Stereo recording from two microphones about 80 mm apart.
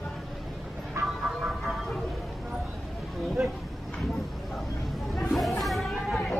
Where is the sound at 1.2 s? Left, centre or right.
Centre.